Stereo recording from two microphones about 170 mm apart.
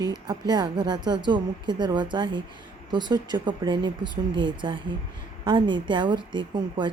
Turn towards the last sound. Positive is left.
turn(degrees=-30)  # may be behind; listen again after turning